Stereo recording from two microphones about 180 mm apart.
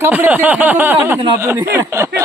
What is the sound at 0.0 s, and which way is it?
Speech, 10° right (ahead or behind).